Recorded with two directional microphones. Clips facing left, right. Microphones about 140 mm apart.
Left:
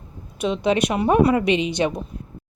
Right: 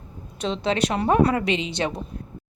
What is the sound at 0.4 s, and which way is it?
Speech, 15° left (ahead or behind).